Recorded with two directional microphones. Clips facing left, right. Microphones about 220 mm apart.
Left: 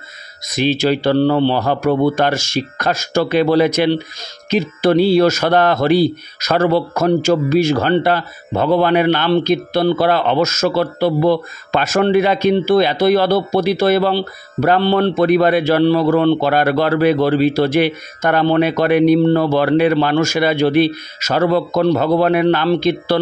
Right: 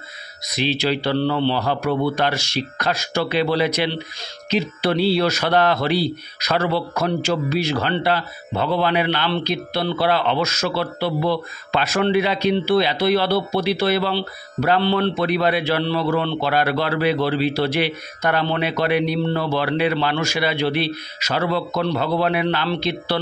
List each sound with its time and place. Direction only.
0.5 s a man's voice: 50° left (ahead or behind)